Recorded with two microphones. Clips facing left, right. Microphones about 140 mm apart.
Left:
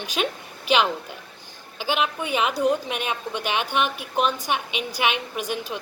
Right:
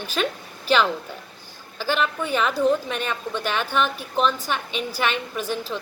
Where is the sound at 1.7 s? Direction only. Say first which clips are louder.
Right 1 dB; 15° left (ahead or behind).